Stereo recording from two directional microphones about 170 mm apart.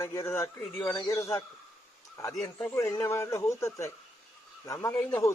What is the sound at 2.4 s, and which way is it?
Speech, 5° left (ahead or behind).